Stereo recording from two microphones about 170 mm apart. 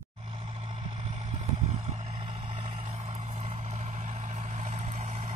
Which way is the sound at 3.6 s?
45° right (ahead or behind).